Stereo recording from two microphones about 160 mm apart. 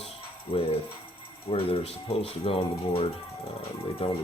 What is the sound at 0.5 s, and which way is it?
Speech, 35° left (ahead or behind).